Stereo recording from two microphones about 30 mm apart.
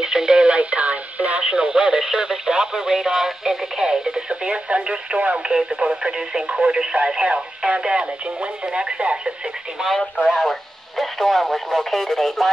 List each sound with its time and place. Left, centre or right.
0.0 s radio: right
0.5 s radio: right
1.5 s speech: right
4.3 s speech: right
5.6 s speech: right
10.2 s speech: centre
10.5 s speech: centre